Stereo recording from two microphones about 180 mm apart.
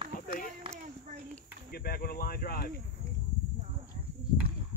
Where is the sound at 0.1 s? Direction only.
50° left (ahead or behind).